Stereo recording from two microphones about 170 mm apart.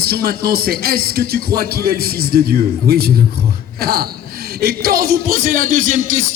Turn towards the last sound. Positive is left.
turn(degrees=-50)  # may be behind; listen again after turning